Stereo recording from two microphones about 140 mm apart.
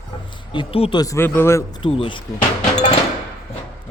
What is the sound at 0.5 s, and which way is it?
Speech, 40° left (ahead or behind).